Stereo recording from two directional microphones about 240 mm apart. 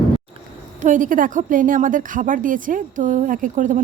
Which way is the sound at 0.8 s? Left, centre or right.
Right.